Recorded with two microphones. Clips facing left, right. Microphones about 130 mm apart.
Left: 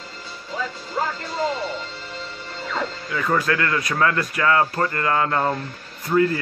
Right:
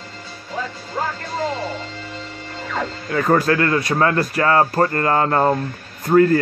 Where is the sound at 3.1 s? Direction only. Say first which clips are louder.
Right 6 dB; 45° right (ahead or behind).